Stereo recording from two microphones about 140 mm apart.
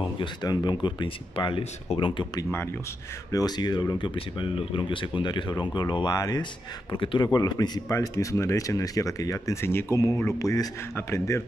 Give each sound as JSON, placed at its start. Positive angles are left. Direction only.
{"t": 0.0, "sound": "speech", "side_deg": 30}